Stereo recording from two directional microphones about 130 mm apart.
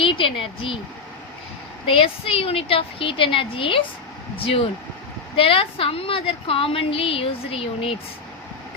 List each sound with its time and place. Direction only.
0.0 s speech: 40° left (ahead or behind)
1.9 s a woman's voice: 45° left (ahead or behind)